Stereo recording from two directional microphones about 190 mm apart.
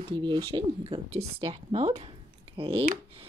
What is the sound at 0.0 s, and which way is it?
Speech, 25° right (ahead or behind).